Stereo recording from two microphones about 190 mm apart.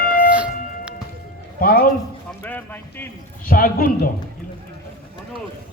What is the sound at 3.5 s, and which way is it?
Speech, 45° left (ahead or behind).